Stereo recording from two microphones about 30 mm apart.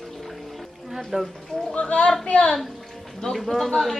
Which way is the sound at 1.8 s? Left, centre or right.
Left.